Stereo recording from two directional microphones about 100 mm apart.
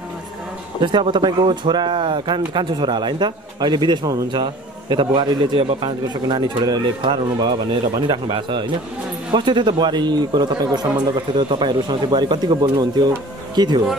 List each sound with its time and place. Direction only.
0.8 s speech: 50° right (ahead or behind)